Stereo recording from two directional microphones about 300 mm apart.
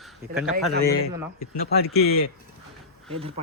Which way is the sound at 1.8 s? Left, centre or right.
Left.